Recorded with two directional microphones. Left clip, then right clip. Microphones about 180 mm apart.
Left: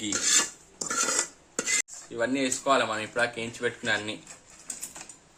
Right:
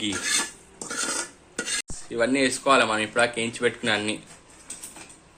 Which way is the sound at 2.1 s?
5° right (ahead or behind).